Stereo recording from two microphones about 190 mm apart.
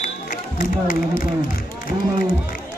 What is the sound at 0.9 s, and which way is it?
Speech, 45° left (ahead or behind).